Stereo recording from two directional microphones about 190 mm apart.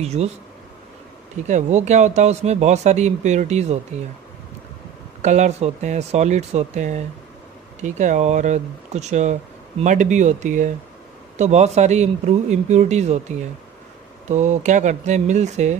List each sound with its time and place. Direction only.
0.0 s speech: 35° right (ahead or behind)
1.5 s speech: 40° right (ahead or behind)
5.2 s speech: 35° right (ahead or behind)
14.3 s speech: 40° right (ahead or behind)